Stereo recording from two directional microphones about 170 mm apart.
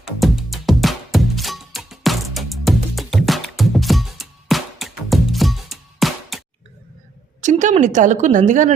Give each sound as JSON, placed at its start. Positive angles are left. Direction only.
{"t": 0.0, "sound": "music", "side_deg": 0}
{"t": 7.4, "sound": "a woman's voice", "side_deg": -45}